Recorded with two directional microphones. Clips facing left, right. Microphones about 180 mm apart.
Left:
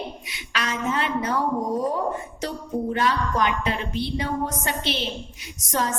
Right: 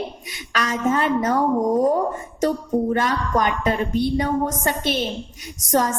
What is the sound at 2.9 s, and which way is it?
A woman's voice, 45° right (ahead or behind).